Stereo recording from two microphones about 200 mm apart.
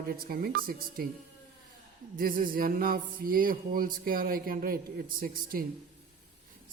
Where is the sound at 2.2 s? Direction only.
45° right (ahead or behind).